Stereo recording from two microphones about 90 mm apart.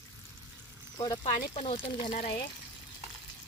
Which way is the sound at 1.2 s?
90° left.